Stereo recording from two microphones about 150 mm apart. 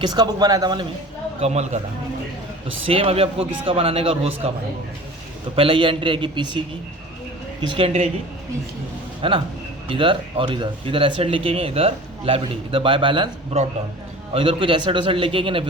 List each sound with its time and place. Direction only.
0.0 s speech: 25° right (ahead or behind)
1.4 s speech: 45° right (ahead or behind)
2.8 s speech: 40° right (ahead or behind)
5.5 s speech: 35° right (ahead or behind)
7.7 s speech: 40° right (ahead or behind)
9.2 s speech: 35° right (ahead or behind)